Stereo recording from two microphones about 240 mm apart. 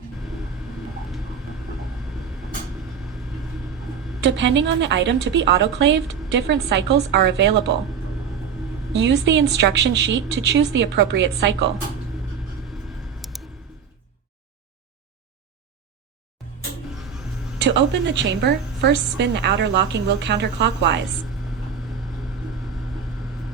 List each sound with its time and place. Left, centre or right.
4.2 s a woman's voice: right
9.0 s a woman's voice: right
13.3 s a sound: centre
17.6 s a woman's voice: right